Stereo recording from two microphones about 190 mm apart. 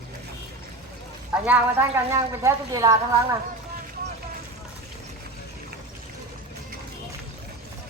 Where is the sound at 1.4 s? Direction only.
10° right (ahead or behind).